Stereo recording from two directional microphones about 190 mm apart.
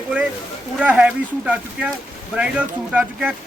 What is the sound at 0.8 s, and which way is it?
Speech, 5° right (ahead or behind).